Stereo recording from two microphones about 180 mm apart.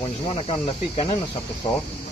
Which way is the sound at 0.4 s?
30° left (ahead or behind).